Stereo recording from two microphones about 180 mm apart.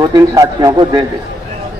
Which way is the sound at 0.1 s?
20° right (ahead or behind).